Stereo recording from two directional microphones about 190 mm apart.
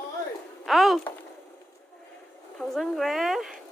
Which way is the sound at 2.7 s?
Centre (ahead or behind).